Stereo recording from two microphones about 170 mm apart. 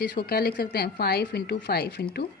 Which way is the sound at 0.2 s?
65° left (ahead or behind).